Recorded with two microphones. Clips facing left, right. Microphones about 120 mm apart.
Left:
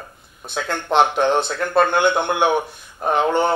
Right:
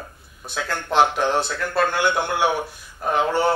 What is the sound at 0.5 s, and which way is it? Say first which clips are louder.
A man's voice: left 2 dB; 20° left (ahead or behind).